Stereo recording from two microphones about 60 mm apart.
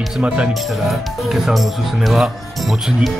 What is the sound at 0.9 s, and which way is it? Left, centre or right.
Speech, centre.